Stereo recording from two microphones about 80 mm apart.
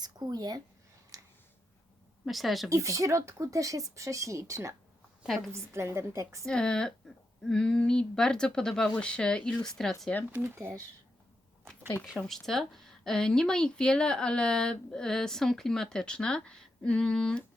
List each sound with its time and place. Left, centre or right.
0.0 s speech: right
1.1 s a sound: right
2.2 s speech: centre
2.6 s speech: right
6.4 s speech: centre
10.3 s speech: right
12.3 s speech: centre